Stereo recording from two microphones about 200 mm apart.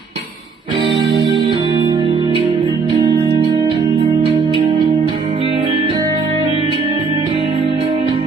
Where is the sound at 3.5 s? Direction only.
20° right (ahead or behind).